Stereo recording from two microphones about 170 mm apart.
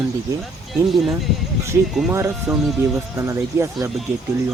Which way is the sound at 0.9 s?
Centre (ahead or behind).